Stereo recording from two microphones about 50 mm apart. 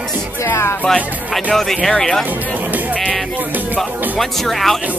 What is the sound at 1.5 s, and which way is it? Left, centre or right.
Speech, centre.